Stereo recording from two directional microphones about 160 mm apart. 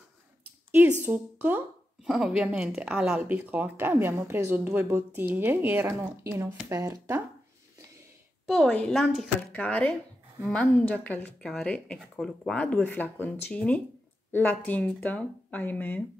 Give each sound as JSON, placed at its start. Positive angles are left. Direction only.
{"t": 0.7, "sound": "speech", "side_deg": -10}
{"t": 8.5, "sound": "a woman's voice", "side_deg": 5}
{"t": 9.5, "sound": "speech", "side_deg": 10}